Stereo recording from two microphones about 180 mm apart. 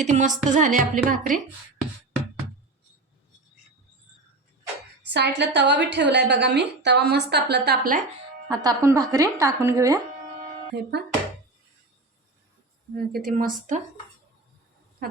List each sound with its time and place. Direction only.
0.0 s a woman's voice: 40° right (ahead or behind)
5.0 s a woman's voice: 70° right (ahead or behind); by 8.0 s 55° right (ahead or behind)
8.4 s speech: 20° right (ahead or behind)
10.7 s a woman's voice: 65° right (ahead or behind)
13.1 s a woman's voice: 55° right (ahead or behind)
15.0 s a sound: 55° right (ahead or behind)